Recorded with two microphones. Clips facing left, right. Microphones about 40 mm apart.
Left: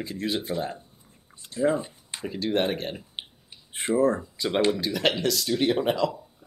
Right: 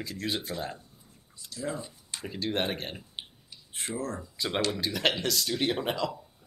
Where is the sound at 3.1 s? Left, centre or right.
Left.